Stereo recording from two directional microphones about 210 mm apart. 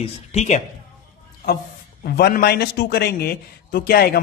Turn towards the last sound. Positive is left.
turn(degrees=45)  # may be behind; listen again after turning